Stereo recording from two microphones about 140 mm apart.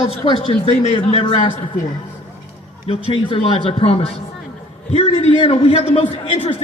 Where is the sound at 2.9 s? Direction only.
40° left (ahead or behind).